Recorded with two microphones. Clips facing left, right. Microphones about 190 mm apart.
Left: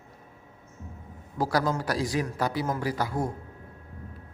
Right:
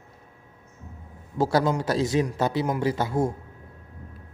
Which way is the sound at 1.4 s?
25° right (ahead or behind).